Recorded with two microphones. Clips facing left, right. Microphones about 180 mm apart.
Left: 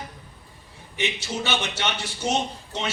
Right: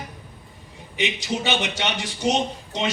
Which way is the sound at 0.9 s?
15° right (ahead or behind).